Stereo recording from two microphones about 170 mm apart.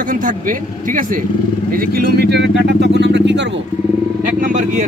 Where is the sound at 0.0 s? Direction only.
50° right (ahead or behind); by 3.6 s 90° right.